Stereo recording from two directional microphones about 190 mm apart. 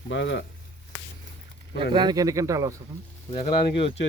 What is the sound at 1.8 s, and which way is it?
Speech, 25° right (ahead or behind).